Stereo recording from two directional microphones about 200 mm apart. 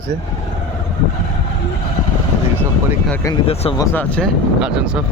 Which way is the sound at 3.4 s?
30° left (ahead or behind).